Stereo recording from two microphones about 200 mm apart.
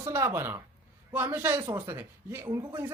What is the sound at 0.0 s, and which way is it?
Speech, 15° right (ahead or behind).